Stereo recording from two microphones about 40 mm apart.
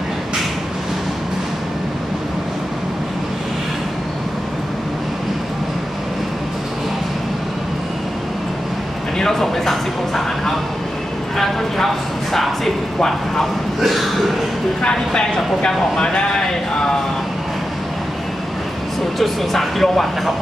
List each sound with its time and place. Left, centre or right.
9.2 s a sound: centre
13.7 s speech: centre
14.8 s speech: left
19.1 s speech: centre